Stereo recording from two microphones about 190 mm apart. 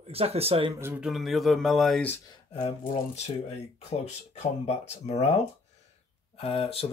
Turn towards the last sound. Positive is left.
turn(degrees=30)  # may be behind; listen again after turning